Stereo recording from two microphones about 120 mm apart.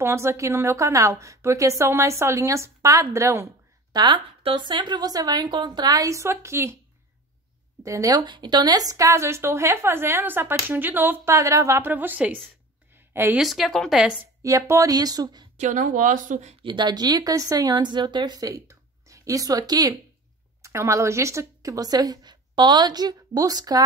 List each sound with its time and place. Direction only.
0.0 s a woman's voice: 20° right (ahead or behind)
3.9 s a woman's voice: 40° right (ahead or behind); by 6.8 s 25° right (ahead or behind)
7.8 s a woman's voice: 25° right (ahead or behind)
12.9 s a sound: 20° right (ahead or behind)
13.4 s speech: centre (ahead or behind)
14.4 s speech: 25° right (ahead or behind)
15.5 s speech: 85° right
16.6 s a woman's voice: 40° right (ahead or behind)